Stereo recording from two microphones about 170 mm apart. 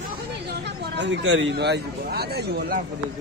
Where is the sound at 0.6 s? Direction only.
90° right; by 2.8 s 70° right (ahead or behind).